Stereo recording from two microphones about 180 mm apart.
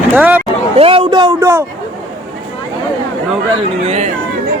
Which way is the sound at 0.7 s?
30° right (ahead or behind).